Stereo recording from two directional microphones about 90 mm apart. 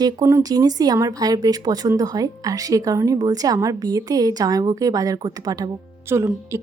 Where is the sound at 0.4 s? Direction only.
45° right (ahead or behind).